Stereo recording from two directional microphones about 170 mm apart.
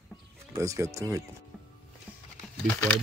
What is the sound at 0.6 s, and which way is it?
Speech, 20° right (ahead or behind).